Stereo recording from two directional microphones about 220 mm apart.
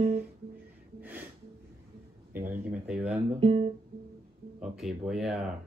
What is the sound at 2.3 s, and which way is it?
Speech, 10° right (ahead or behind).